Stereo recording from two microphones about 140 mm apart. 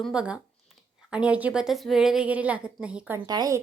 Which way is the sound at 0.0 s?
5° right (ahead or behind).